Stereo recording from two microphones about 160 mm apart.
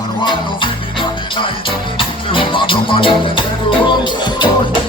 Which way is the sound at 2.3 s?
30° left (ahead or behind).